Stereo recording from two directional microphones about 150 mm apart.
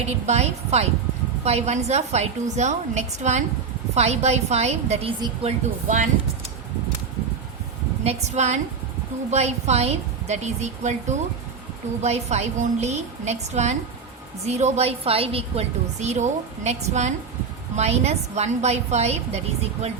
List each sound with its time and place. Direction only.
0.0 s a woman's voice: 45° right (ahead or behind)
8.0 s a woman's voice: 50° right (ahead or behind)